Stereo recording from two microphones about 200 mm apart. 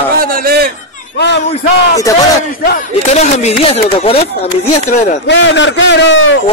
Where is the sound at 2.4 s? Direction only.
40° left (ahead or behind).